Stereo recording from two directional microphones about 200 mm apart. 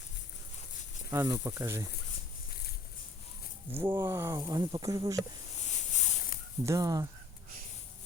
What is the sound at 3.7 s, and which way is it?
Speech, 10° right (ahead or behind).